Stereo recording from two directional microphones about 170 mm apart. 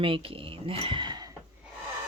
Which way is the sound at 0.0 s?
30° right (ahead or behind).